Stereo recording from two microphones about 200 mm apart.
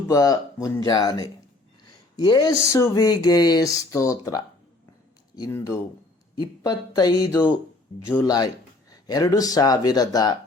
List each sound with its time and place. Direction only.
0.1 s speech: 15° left (ahead or behind)
5.4 s speech: 15° left (ahead or behind)